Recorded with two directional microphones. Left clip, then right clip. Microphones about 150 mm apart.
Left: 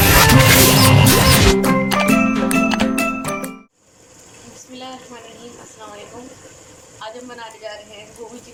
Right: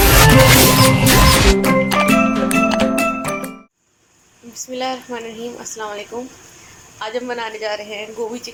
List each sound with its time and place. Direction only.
0.0 s music: centre (ahead or behind)
4.7 s a sound: 25° right (ahead or behind)
7.0 s a woman's voice: 30° right (ahead or behind)